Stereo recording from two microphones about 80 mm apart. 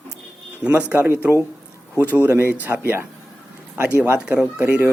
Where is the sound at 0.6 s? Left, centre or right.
Centre.